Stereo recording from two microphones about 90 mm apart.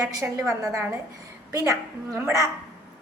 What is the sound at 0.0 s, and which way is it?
A woman's voice, 40° right (ahead or behind).